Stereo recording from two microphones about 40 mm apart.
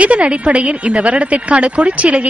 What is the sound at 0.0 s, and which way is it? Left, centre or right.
A woman's voice, right.